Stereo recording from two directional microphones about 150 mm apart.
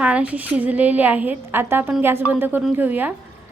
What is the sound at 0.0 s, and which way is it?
A woman's voice, 10° right (ahead or behind).